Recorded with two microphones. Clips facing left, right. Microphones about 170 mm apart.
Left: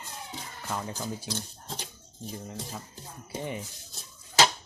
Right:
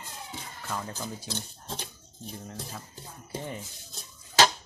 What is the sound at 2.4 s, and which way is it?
Speech, 5° left (ahead or behind).